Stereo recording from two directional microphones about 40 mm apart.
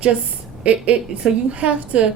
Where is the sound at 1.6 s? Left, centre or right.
Right.